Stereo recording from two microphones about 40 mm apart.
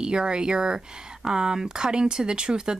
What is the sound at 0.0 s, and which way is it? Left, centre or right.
Speech, right.